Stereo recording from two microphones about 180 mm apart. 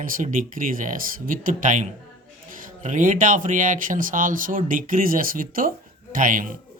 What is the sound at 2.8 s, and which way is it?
Speech, 45° right (ahead or behind).